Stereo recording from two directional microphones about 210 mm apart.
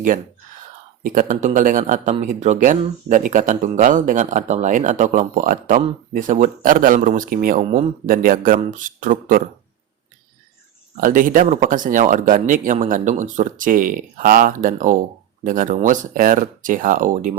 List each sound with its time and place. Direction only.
1.0 s speech: 40° right (ahead or behind)
10.9 s speech: 40° right (ahead or behind)